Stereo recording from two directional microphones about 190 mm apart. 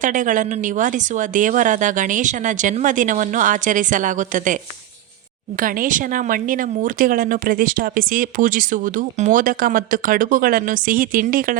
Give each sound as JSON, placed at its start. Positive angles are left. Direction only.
{"t": 0.0, "sound": "speech", "side_deg": -45}
{"t": 5.5, "sound": "speech", "side_deg": -45}